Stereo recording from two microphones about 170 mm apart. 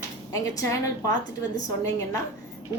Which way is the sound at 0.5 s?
20° left (ahead or behind).